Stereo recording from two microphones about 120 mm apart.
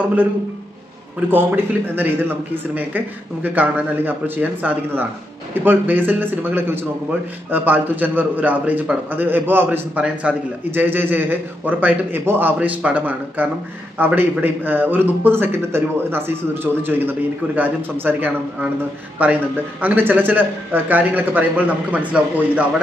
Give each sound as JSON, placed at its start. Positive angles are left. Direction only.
{"t": 1.3, "sound": "a man's voice", "side_deg": -15}
{"t": 17.6, "sound": "a man's voice", "side_deg": -15}